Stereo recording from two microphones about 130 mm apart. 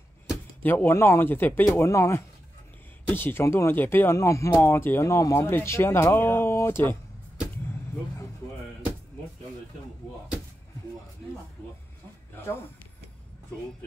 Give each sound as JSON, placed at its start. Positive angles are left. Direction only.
{"t": 0.6, "sound": "speech", "side_deg": 15}